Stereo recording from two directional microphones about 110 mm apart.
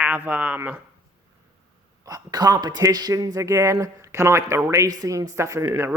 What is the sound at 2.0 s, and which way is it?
Speech, 35° right (ahead or behind).